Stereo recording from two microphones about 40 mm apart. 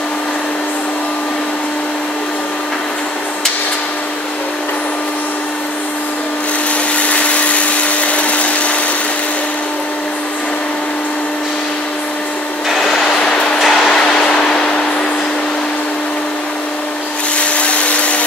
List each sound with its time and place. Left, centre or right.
7.0 s blender: left
12.7 s vehicle: centre
13.2 s music: left
13.6 s music: centre
13.8 s vehicle: centre
17.4 s vacuum cleaner: left